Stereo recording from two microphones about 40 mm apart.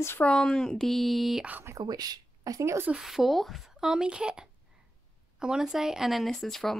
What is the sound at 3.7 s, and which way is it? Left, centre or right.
Speech, centre.